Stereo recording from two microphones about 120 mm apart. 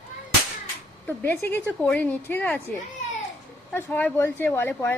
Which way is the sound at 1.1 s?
15° left (ahead or behind).